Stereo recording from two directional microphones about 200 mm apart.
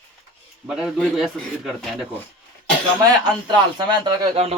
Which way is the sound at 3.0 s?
20° right (ahead or behind).